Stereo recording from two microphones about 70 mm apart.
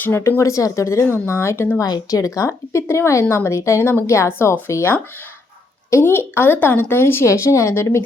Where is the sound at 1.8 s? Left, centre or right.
Left.